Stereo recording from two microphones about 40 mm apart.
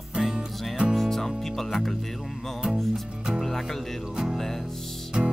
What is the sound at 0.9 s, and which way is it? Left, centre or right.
Speech, centre.